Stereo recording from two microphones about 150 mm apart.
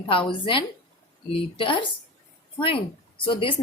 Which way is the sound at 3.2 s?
35° left (ahead or behind).